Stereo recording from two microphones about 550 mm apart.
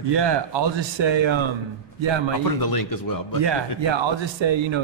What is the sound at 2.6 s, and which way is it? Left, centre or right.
Speech, left.